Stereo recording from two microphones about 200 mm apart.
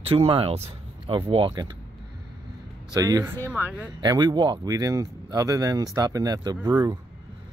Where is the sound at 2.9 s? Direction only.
15° right (ahead or behind).